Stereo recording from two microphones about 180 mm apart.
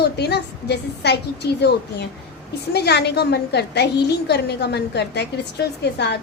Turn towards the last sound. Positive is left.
turn(degrees=70)  # may be behind; listen again after turning